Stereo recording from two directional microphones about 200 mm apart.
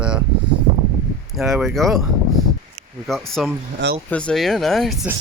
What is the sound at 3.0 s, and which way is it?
Speech, centre (ahead or behind).